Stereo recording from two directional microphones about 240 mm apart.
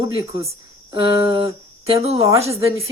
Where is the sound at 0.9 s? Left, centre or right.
Centre.